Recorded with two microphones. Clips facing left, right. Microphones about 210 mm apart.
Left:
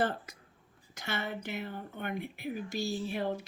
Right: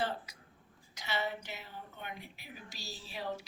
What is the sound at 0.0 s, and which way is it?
Speech, 50° left (ahead or behind).